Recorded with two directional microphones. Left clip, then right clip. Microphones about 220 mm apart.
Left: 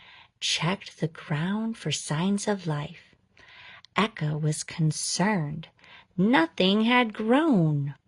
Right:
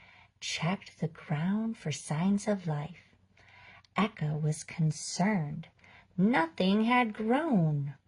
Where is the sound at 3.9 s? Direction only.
40° left (ahead or behind).